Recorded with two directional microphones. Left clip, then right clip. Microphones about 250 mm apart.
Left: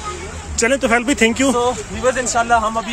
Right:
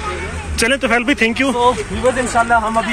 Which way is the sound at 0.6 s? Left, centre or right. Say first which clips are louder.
Even; centre.